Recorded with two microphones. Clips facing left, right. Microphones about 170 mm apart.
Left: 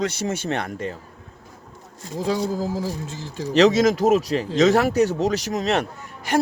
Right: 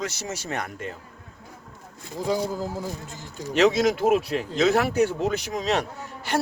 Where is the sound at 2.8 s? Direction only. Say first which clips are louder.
Left 5 dB; 90° left.